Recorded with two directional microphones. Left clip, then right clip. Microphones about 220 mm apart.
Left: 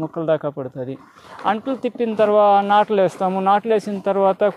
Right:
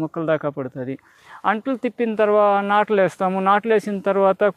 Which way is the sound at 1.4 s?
25° right (ahead or behind).